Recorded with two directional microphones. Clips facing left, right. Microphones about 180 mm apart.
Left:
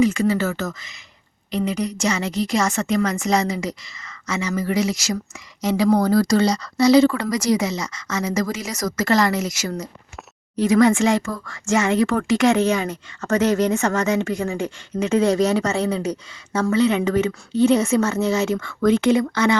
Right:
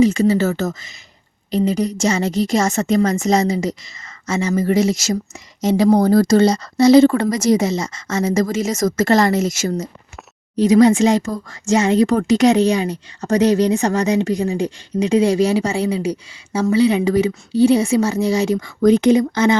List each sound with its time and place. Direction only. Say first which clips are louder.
0.0 s a woman's voice: right 4 dB; 40° right (ahead or behind)
4.9 s a woman's voice: right 5 dB; 25° right (ahead or behind)
6.4 s a woman's voice: right 5 dB; 50° right (ahead or behind)
6.7 s a woman's voice: right 4 dB; 25° right (ahead or behind)